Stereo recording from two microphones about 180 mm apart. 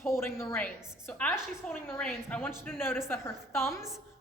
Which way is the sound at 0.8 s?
5° right (ahead or behind).